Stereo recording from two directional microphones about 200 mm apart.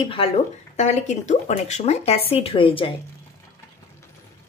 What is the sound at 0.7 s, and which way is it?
A woman's voice, 35° left (ahead or behind).